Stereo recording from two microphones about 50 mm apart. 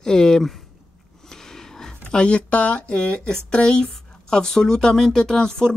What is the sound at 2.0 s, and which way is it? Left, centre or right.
Speech, centre.